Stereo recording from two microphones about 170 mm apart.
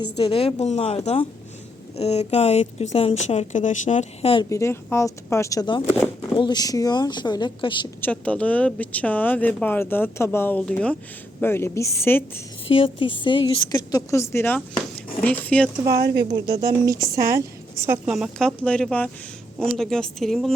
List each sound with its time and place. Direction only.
0.0 s a woman's voice: 30° left (ahead or behind)
4.4 s a woman's voice: 15° left (ahead or behind)
8.0 s speech: 5° left (ahead or behind)
12.6 s a woman's voice: 30° left (ahead or behind); by 15.7 s 10° left (ahead or behind)
16.0 s a woman's voice: 70° right (ahead or behind)
17.8 s speech: 10° right (ahead or behind)